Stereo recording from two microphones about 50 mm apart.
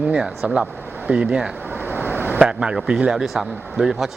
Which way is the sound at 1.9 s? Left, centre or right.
Right.